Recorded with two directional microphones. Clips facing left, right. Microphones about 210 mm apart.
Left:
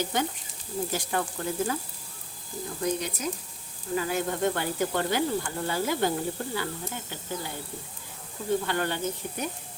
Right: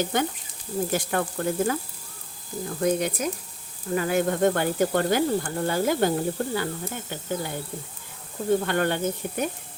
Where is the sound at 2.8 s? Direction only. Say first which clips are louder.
Right 6 dB; 55° right (ahead or behind).